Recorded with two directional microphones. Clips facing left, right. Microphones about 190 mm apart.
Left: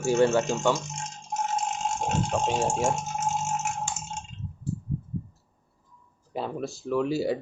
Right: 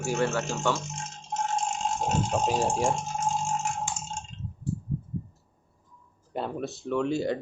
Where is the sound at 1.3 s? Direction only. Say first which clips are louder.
Even; 5° left (ahead or behind).